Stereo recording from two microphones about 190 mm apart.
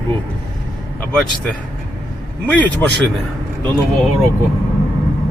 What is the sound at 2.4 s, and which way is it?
Speech, 10° left (ahead or behind).